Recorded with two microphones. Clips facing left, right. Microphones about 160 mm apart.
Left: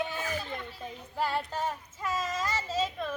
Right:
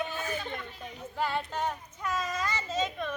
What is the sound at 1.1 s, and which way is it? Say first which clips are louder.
Child singing: even; 5° left (ahead or behind).